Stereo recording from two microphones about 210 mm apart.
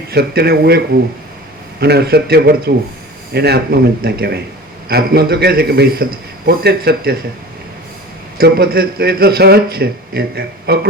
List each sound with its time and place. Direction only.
0.1 s speech: 50° right (ahead or behind)
1.8 s speech: 50° right (ahead or behind)
8.4 s speech: 45° right (ahead or behind)